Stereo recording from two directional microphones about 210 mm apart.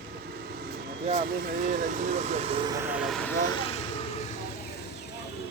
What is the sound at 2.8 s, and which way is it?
Vehicle, 5° right (ahead or behind).